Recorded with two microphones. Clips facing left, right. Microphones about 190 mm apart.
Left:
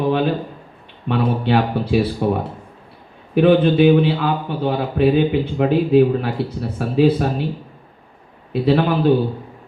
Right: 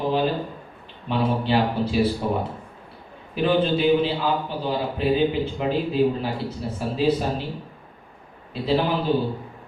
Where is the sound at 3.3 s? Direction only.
60° left (ahead or behind).